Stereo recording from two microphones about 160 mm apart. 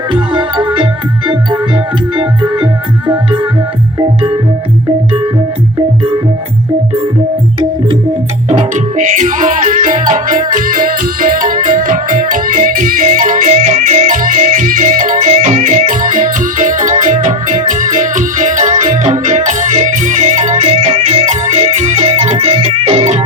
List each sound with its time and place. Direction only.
0.1 s music: 30° right (ahead or behind)
2.1 s music: 30° right (ahead or behind)
4.0 s music: 35° right (ahead or behind)
8.7 s music: 50° right (ahead or behind)